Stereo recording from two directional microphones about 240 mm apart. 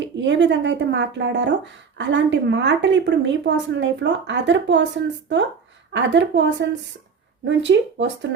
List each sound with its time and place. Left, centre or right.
0.0 s a woman's voice: right
5.9 s a woman's voice: right